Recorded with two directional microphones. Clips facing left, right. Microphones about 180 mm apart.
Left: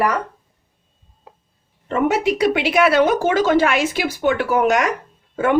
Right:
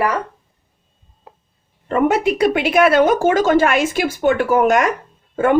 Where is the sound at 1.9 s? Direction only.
50° right (ahead or behind).